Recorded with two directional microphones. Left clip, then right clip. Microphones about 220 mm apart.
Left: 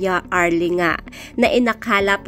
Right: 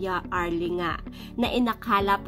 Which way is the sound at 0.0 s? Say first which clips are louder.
Left 10 dB; 25° left (ahead or behind).